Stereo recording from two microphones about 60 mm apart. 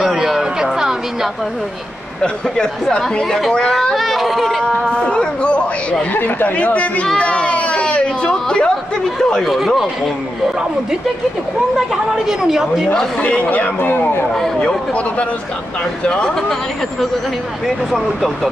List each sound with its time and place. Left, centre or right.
0.0 s a sound: centre
2.2 s speech: centre
3.9 s speech: centre
4.9 s a sound: centre
6.1 s speech: left; by 9.5 s centre
9.5 s speech: centre
11.9 s a woman's voice: centre
13.2 s speech: left
14.3 s speech: centre
16.1 s speech: centre